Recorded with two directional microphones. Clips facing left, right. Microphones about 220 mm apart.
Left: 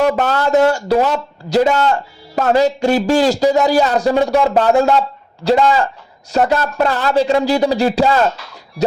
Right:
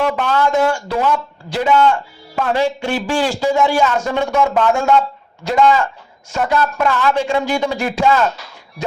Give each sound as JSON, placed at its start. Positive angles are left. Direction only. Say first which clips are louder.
{"t": 0.0, "sound": "speech", "louder": "left 2 dB", "side_deg": 40}